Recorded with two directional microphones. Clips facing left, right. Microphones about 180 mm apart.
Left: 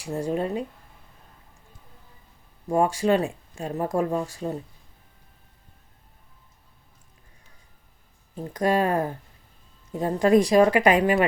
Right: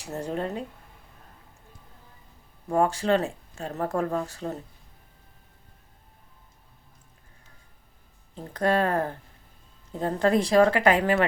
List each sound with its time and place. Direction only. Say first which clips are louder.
0.0 s speech: left 4 dB; 10° left (ahead or behind)
2.6 s speech: left 2 dB; 15° left (ahead or behind)
8.5 s speech: left 1 dB; 15° left (ahead or behind)